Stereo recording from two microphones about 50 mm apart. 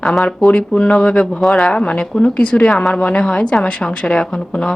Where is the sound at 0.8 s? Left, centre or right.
Centre.